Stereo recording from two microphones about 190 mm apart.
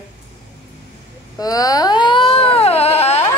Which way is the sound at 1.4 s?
20° left (ahead or behind).